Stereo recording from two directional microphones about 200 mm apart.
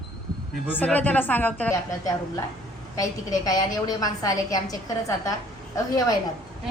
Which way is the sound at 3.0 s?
15° left (ahead or behind).